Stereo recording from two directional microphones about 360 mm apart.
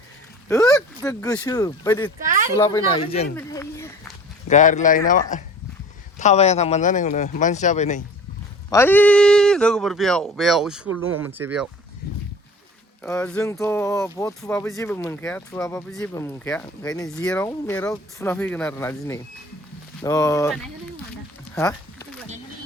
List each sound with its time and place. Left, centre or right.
0.4 s speech: centre
2.2 s a sound: right
2.6 s speech: centre
4.4 s speech: centre
8.7 s speech: centre
10.8 s speech: right
11.2 s speech: centre
12.0 s a sound: left
13.0 s speech: centre
21.5 s a sound: centre